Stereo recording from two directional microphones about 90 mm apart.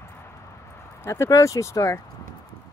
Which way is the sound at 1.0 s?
35° left (ahead or behind).